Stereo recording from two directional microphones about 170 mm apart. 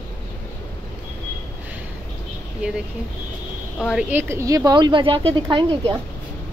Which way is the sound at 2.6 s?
5° right (ahead or behind).